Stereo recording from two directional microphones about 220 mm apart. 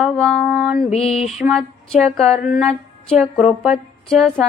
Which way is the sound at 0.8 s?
30° left (ahead or behind).